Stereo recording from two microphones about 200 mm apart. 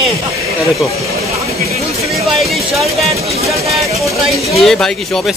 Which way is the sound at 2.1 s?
Centre (ahead or behind).